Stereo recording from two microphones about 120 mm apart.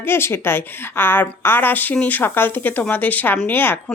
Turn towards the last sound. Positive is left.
turn(degrees=15)  # may be behind; listen again after turning